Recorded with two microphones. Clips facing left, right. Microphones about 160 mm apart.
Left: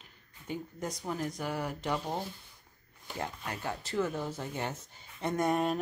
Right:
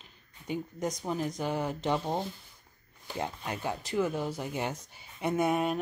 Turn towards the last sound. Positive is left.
turn(degrees=-5)  # may be behind; listen again after turning